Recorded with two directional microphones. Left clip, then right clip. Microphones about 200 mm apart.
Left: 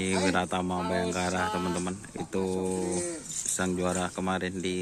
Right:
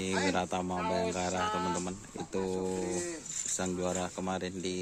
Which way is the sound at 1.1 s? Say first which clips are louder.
Left 3 dB; 10° right (ahead or behind).